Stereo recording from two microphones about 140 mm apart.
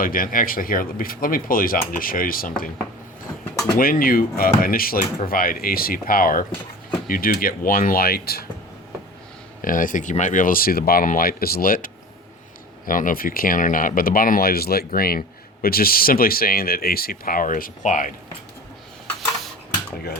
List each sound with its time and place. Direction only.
0.0 s speech: 85° left
3.8 s speech: 90° left
9.6 s speech: 75° left (ahead or behind); by 11.9 s 90° left
12.8 s speech: 75° left (ahead or behind)